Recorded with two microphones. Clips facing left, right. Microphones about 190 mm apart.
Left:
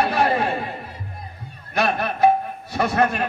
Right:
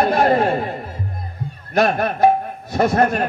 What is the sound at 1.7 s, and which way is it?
Speech, 40° right (ahead or behind).